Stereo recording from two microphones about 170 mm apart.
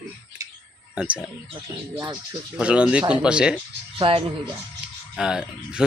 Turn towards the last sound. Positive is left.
turn(degrees=-5)  # may be behind; listen again after turning